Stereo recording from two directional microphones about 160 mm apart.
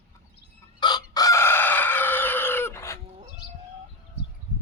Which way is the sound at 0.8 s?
25° left (ahead or behind).